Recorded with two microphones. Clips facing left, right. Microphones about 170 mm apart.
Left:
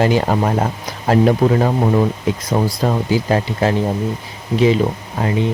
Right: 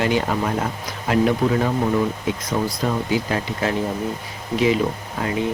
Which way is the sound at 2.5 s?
40° left (ahead or behind).